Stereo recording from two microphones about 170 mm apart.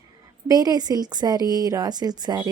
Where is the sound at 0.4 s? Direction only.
20° right (ahead or behind).